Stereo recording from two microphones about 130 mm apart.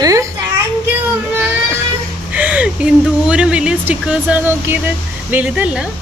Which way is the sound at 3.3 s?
10° right (ahead or behind).